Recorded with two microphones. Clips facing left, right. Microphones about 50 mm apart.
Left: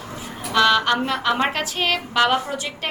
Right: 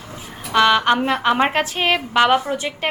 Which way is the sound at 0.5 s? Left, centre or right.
Right.